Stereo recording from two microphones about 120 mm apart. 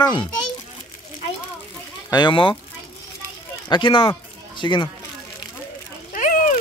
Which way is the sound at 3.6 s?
45° left (ahead or behind).